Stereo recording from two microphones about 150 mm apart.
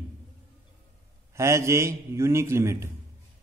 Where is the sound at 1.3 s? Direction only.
20° right (ahead or behind).